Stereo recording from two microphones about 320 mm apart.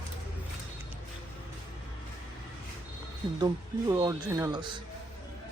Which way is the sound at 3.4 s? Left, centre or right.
Centre.